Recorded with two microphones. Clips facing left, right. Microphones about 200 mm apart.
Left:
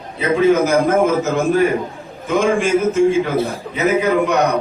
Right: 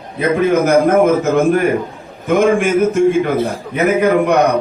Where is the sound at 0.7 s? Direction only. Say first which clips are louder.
Right 4 dB; 55° right (ahead or behind).